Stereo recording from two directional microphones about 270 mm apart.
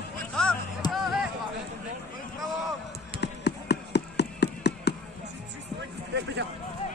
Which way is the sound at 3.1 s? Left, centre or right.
Left.